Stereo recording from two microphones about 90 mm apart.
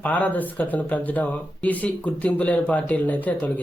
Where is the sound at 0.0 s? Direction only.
20° left (ahead or behind).